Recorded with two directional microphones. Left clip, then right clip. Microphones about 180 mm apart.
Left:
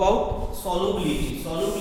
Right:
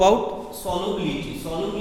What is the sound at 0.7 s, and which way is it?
Speech, 35° right (ahead or behind).